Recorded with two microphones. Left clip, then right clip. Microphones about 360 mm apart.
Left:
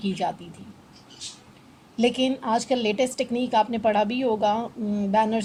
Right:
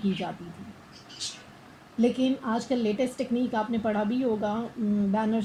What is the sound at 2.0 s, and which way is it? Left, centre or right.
A woman's voice, left.